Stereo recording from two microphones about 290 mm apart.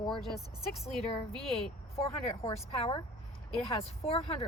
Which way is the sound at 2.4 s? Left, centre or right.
Centre.